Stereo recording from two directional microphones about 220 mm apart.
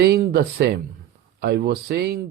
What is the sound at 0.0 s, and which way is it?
Speech, 45° right (ahead or behind).